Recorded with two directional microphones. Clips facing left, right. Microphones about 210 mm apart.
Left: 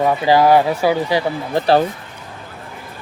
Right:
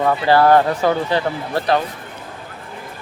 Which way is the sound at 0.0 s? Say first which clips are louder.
Left 1 dB; 15° left (ahead or behind).